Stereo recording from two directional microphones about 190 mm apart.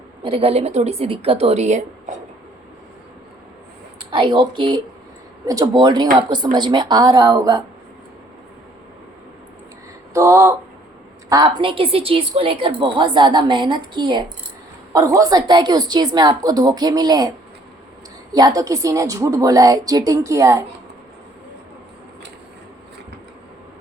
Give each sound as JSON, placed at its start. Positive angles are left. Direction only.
{"t": 0.3, "sound": "speech", "side_deg": -30}
{"t": 4.1, "sound": "a woman's voice", "side_deg": -25}
{"t": 10.2, "sound": "a woman's voice", "side_deg": -15}
{"t": 18.3, "sound": "a woman's voice", "side_deg": -20}